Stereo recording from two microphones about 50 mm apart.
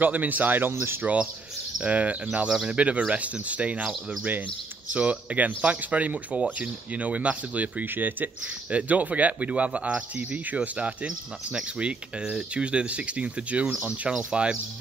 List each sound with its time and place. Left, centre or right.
0.0 s speech: right
1.0 s speech: right
2.4 s speech: centre
2.7 s speech: right
4.9 s speech: right
11.1 s speech: centre